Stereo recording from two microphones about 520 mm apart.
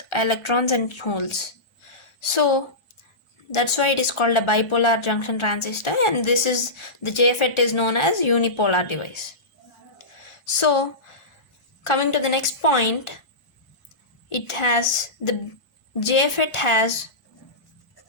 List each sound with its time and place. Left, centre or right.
0.1 s a woman's voice: left
10.4 s a woman's voice: left
14.3 s a woman's voice: left